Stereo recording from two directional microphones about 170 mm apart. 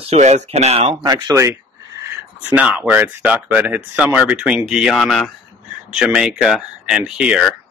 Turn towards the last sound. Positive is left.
turn(degrees=-5)  # may be behind; listen again after turning